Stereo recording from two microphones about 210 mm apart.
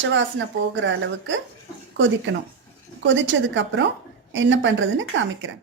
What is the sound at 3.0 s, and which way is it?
Speech, 60° right (ahead or behind).